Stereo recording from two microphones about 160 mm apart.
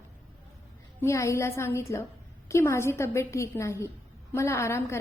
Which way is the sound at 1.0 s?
20° left (ahead or behind).